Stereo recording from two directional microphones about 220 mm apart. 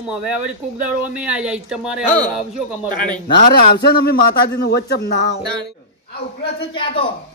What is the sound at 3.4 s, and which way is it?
A man's voice, 45° left (ahead or behind).